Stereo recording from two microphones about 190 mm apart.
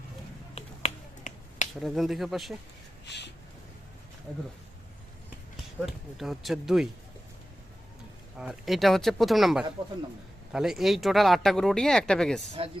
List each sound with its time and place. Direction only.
0.5 s finger snapping: 35° left (ahead or behind)
1.8 s speech: centre (ahead or behind)
3.1 s a sound: 65° left (ahead or behind)
5.8 s speech: centre (ahead or behind)
8.4 s speech: centre (ahead or behind)